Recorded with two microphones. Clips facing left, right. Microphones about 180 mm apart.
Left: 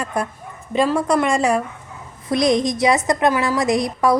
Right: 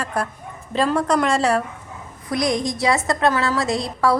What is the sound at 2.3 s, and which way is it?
A woman's voice, 20° left (ahead or behind).